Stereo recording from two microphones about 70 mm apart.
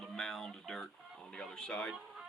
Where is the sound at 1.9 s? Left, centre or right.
Centre.